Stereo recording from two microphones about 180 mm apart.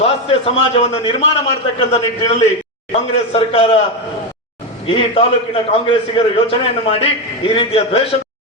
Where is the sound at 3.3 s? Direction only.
30° left (ahead or behind).